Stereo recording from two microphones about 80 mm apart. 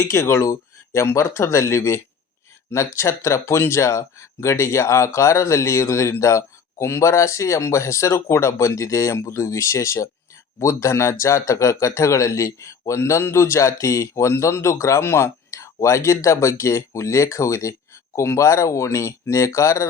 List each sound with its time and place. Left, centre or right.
0.0 s speech: left